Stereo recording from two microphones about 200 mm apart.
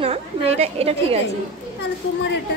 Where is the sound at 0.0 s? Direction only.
30° right (ahead or behind).